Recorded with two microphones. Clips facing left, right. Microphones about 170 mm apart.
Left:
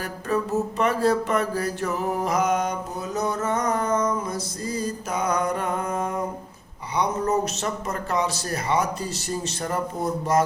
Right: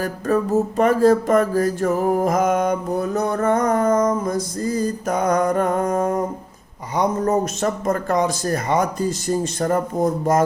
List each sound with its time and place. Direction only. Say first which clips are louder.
0.0 s speech: right 6 dB; 45° right (ahead or behind)